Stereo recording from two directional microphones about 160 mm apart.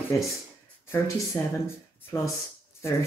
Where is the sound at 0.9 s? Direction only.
20° left (ahead or behind).